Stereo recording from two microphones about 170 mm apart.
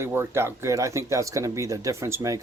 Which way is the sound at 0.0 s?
15° right (ahead or behind).